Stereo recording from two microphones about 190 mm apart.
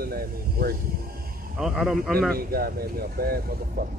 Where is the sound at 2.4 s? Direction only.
50° right (ahead or behind).